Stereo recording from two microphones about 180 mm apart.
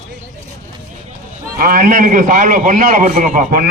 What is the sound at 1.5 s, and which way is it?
A man's voice, 50° right (ahead or behind).